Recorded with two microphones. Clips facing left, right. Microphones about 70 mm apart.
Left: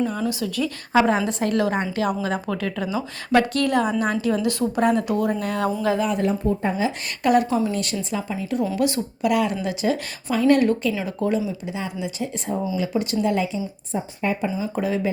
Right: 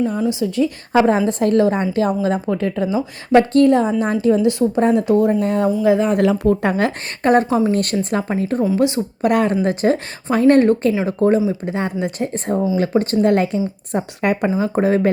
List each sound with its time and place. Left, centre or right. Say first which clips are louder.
0.2 s a woman's voice: right 6 dB; right
0.9 s a woman's voice: right 4 dB; right
5.6 s speech: right 6 dB; centre
6.1 s speech: right 7 dB; right
7.2 s a woman's voice: right 4 dB; right
8.6 s a woman's voice: right 5 dB; right
9.2 s speech: right 5 dB; right
11.6 s a woman's voice: right 7 dB; right
13.9 s speech: right 5 dB; right
14.4 s a woman's voice: right 7 dB; right